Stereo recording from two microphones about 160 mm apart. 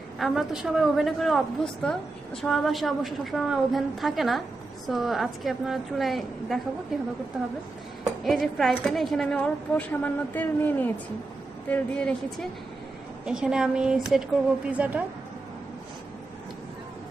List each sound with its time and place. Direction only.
0.2 s a woman's voice: centre (ahead or behind)
8.2 s a woman's voice: centre (ahead or behind)
13.2 s a woman's voice: 5° right (ahead or behind)